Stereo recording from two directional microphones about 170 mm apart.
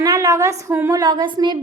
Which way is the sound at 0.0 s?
20° right (ahead or behind).